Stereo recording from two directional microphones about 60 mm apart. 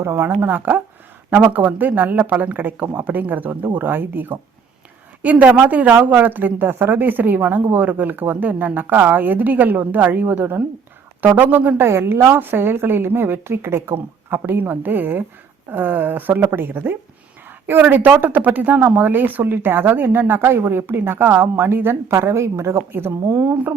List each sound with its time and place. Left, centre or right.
0.0 s a woman's voice: right
11.9 s speech: right
22.1 s a woman's voice: right
22.9 s speech: right